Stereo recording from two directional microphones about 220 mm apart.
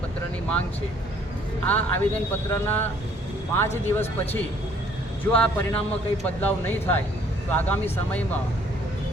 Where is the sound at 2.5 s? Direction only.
10° left (ahead or behind).